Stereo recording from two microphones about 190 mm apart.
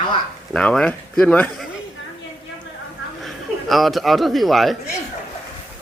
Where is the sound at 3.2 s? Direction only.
Centre (ahead or behind).